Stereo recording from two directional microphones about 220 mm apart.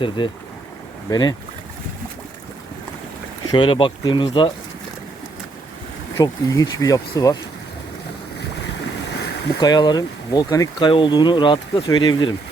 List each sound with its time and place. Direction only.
0.2 s speech: 20° left (ahead or behind)
3.5 s speech: 20° left (ahead or behind)
6.1 s speech: 15° left (ahead or behind)
9.6 s speech: 20° left (ahead or behind)